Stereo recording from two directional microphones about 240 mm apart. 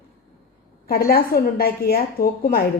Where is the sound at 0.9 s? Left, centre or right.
Left.